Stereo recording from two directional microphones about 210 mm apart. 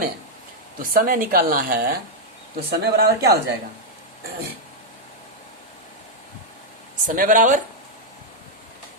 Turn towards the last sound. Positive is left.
turn(degrees=-35)  # may be behind; listen again after turning